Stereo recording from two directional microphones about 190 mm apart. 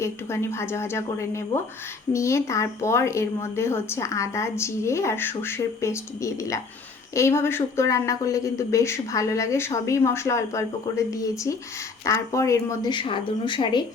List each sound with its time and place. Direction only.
0.0 s speech: 15° left (ahead or behind)